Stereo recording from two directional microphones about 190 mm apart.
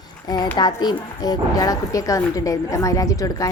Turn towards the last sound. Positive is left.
turn(degrees=15)  # may be behind; listen again after turning